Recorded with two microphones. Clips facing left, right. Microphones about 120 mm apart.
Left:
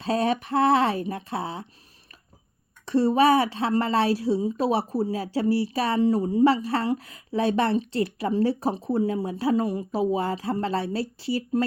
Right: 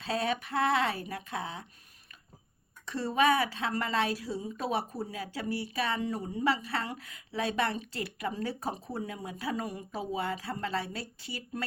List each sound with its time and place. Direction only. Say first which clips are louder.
0.0 s a woman's voice: left 7 dB; 35° left (ahead or behind)
2.8 s a woman's voice: left 8 dB; 40° left (ahead or behind)